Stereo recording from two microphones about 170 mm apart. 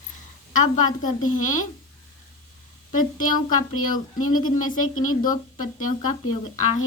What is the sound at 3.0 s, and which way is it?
Speech, 50° left (ahead or behind).